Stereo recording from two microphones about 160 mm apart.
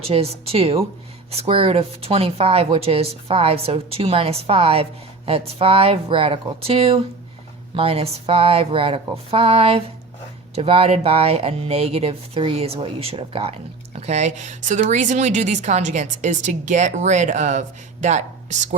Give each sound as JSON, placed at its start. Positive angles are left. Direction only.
{"t": 0.0, "sound": "a woman's voice", "side_deg": -40}